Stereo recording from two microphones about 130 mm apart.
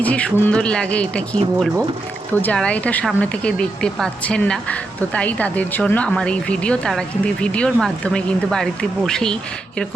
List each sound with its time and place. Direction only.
0.0 s speech: 10° left (ahead or behind)
2.4 s speech: 10° left (ahead or behind)